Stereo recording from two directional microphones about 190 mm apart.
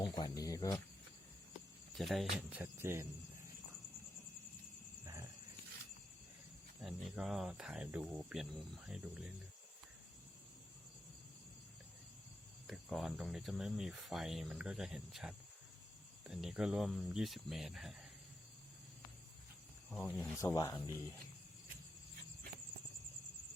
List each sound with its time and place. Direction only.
0.0 s a sound: 20° left (ahead or behind)
2.0 s speech: centre (ahead or behind)
5.0 s wild animals: 15° right (ahead or behind)
6.8 s speech: centre (ahead or behind)
12.6 s speech: centre (ahead or behind)
19.9 s speech: 5° left (ahead or behind)
20.4 s speech: 15° left (ahead or behind)